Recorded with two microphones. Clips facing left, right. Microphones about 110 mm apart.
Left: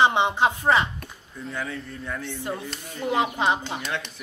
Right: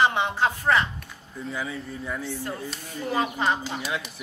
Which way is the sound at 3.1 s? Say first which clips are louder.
Left 2 dB; 20° left (ahead or behind).